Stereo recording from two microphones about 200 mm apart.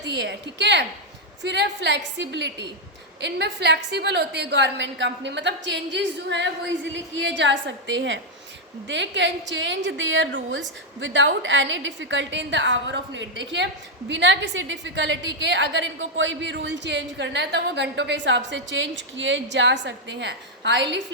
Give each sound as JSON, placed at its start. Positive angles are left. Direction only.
{"t": 0.0, "sound": "a woman's voice", "side_deg": -60}